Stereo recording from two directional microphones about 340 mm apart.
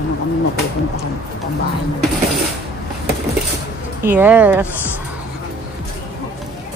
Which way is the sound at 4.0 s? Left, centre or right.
Centre.